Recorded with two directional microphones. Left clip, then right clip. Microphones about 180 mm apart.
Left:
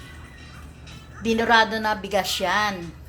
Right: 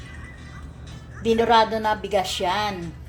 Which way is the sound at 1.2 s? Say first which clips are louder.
Right 1 dB; 5° left (ahead or behind).